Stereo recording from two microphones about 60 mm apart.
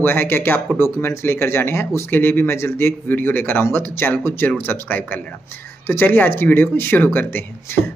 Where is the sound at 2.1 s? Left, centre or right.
Left.